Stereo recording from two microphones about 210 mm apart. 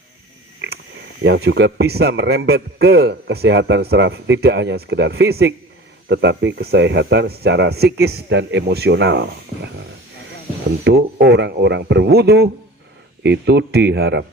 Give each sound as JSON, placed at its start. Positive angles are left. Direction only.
{"t": 1.2, "sound": "a man's voice", "side_deg": -55}
{"t": 10.8, "sound": "a man's voice", "side_deg": -50}